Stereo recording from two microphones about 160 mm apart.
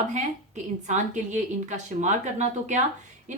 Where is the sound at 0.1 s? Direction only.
50° right (ahead or behind).